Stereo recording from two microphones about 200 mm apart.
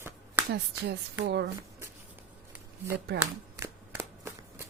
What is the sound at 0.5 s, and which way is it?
Speech, 55° right (ahead or behind).